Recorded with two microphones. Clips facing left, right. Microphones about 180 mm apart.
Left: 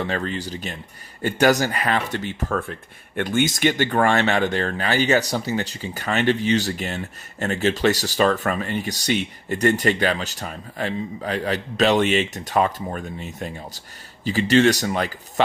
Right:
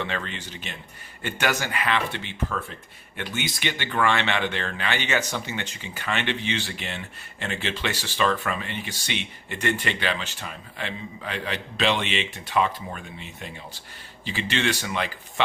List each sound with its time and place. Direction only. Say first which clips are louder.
0.0 s speech: left 6 dB; 40° left (ahead or behind)